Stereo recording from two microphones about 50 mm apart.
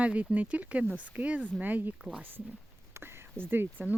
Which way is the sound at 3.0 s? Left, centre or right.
Right.